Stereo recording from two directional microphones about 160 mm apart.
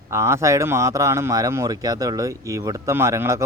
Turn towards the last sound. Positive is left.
turn(degrees=-20)  # may be behind; listen again after turning